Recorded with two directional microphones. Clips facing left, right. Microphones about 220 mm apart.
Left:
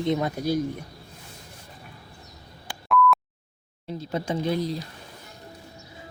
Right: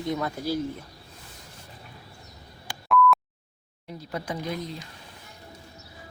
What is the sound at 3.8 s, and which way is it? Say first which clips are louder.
Speech: left 5 dB; 25° left (ahead or behind).